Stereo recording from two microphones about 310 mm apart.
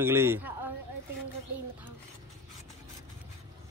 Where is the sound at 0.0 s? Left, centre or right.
Centre.